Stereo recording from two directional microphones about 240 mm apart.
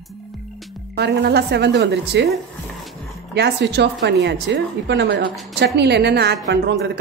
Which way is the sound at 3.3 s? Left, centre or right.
Right.